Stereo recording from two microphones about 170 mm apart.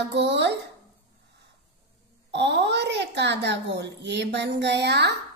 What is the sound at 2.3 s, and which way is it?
A child's voice, 90° right.